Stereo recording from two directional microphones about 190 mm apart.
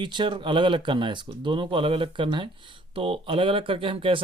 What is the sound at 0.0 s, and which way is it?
Speech, 25° right (ahead or behind).